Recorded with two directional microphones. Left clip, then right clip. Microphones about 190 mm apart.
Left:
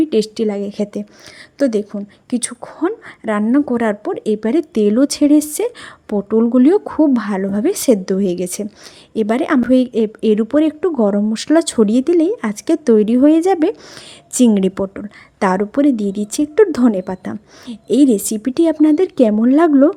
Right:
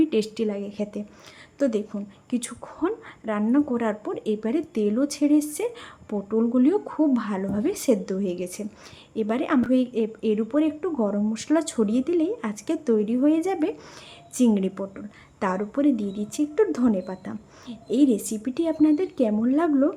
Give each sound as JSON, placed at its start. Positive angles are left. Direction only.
{"t": 0.0, "sound": "a woman's voice", "side_deg": 35}